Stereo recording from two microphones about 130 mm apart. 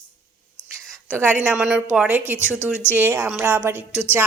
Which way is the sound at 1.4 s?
5° right (ahead or behind).